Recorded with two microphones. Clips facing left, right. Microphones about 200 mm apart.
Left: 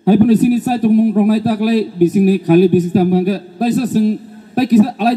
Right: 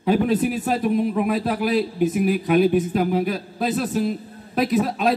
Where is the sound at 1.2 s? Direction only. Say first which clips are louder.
Left 8 dB; 35° left (ahead or behind).